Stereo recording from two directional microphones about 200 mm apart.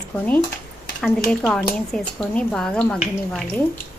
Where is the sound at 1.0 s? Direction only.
Centre (ahead or behind).